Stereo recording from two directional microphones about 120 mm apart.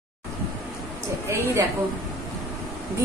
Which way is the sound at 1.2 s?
20° right (ahead or behind).